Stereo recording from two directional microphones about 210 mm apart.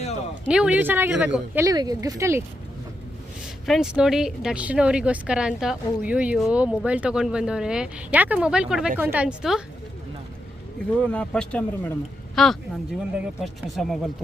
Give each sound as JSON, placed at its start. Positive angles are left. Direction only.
{"t": 0.4, "sound": "speech", "side_deg": -5}
{"t": 3.4, "sound": "speech", "side_deg": 0}
{"t": 11.0, "sound": "speech", "side_deg": 5}